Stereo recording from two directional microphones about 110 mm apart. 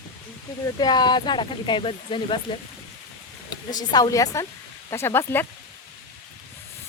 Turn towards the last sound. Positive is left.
turn(degrees=20)  # may be behind; listen again after turning